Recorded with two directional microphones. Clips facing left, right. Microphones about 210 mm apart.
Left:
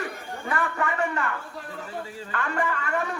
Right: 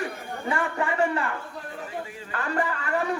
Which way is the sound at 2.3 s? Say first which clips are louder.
Even; 35° right (ahead or behind).